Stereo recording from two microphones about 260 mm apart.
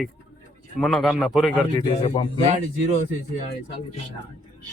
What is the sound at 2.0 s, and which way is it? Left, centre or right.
Speech, centre.